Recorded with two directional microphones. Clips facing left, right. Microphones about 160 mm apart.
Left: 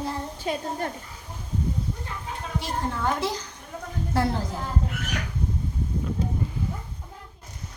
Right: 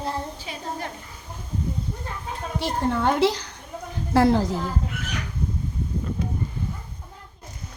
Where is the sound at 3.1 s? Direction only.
75° right (ahead or behind).